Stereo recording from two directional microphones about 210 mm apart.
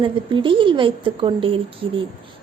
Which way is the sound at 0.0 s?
25° right (ahead or behind).